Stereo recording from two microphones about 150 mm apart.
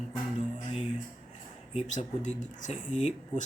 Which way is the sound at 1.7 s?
50° left (ahead or behind).